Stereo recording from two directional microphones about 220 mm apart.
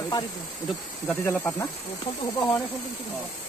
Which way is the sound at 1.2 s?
15° left (ahead or behind).